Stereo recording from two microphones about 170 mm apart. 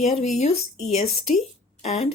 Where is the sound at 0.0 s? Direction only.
40° left (ahead or behind).